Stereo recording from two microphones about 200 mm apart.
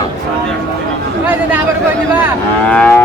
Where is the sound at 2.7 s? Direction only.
5° left (ahead or behind).